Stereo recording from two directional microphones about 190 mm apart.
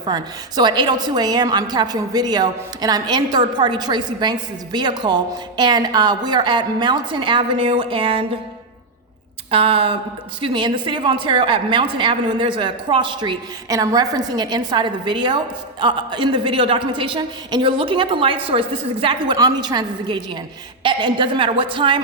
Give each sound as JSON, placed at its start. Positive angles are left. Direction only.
{"t": 0.0, "sound": "a woman's voice", "side_deg": -20}
{"t": 9.5, "sound": "a woman's voice", "side_deg": -30}